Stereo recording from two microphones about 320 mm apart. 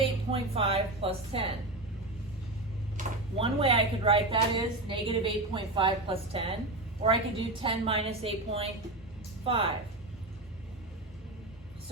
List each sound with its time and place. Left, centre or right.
0.3 s speech: centre
3.0 s a woman's voice: centre